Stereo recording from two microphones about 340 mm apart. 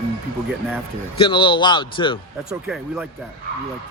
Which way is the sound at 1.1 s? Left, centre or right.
Centre.